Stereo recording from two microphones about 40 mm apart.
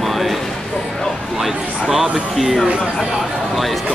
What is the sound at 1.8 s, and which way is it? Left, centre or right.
Speech, centre.